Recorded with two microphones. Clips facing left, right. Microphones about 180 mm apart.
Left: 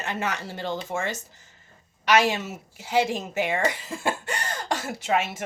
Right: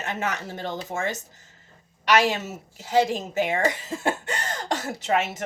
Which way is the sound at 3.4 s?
20° right (ahead or behind).